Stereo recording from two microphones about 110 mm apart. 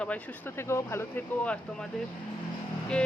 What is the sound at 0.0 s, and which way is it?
Speech, 15° left (ahead or behind).